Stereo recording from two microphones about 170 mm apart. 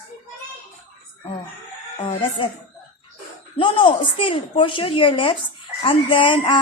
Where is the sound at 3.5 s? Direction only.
30° left (ahead or behind).